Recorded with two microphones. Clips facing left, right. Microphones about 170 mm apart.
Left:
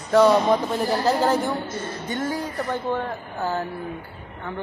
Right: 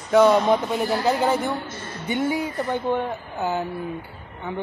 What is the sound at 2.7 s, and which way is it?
Speech, 20° right (ahead or behind).